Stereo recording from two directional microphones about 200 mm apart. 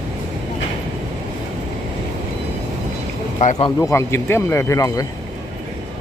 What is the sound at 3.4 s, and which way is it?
Speech, 35° left (ahead or behind).